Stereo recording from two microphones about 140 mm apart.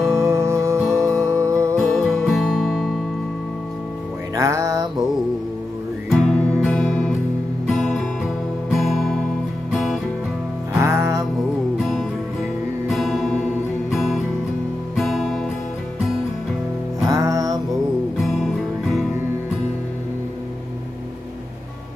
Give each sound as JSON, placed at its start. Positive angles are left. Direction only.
{"t": 0.0, "sound": "music", "side_deg": -20}
{"t": 1.9, "sound": "music", "side_deg": 5}
{"t": 4.4, "sound": "music", "side_deg": -25}
{"t": 6.0, "sound": "music", "side_deg": 0}
{"t": 7.6, "sound": "guitar", "side_deg": 5}
{"t": 8.7, "sound": "music", "side_deg": 0}
{"t": 10.8, "sound": "music", "side_deg": -20}
{"t": 11.8, "sound": "music", "side_deg": 0}
{"t": 15.0, "sound": "guitar", "side_deg": 0}
{"t": 17.0, "sound": "music", "side_deg": -25}
{"t": 18.2, "sound": "music", "side_deg": 0}